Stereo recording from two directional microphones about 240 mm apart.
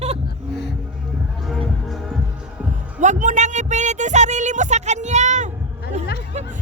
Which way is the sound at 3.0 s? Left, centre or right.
Right.